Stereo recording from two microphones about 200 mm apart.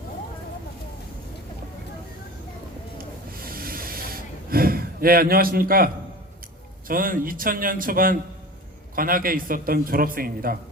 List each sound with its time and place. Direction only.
3.0 s snort: 45° right (ahead or behind)
6.8 s a man's voice: 45° right (ahead or behind)